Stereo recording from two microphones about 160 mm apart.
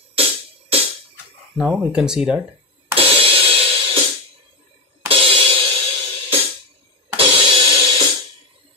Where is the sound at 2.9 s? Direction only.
35° right (ahead or behind).